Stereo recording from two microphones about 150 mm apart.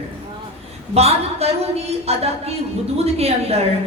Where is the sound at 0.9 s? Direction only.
45° right (ahead or behind).